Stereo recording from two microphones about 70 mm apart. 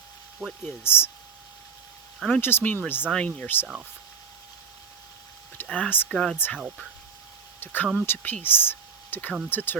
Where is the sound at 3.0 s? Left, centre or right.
Centre.